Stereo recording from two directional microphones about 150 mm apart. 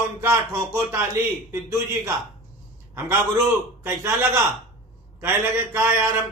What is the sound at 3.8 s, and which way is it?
A man's voice, 15° right (ahead or behind).